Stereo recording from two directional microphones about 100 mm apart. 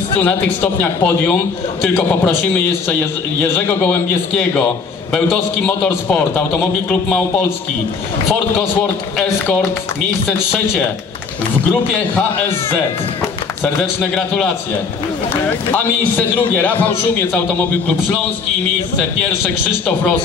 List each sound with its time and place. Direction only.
0.2 s a man's voice: 20° left (ahead or behind)
3.5 s a man's voice: 20° left (ahead or behind)
14.1 s a man's voice: 5° left (ahead or behind)
16.3 s a man's voice: 15° left (ahead or behind)